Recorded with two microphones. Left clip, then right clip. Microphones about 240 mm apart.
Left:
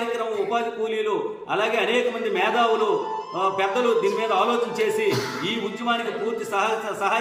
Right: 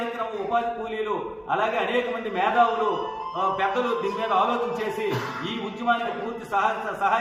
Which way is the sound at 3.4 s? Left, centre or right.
Centre.